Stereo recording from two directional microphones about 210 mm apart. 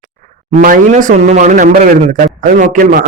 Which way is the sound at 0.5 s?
35° right (ahead or behind).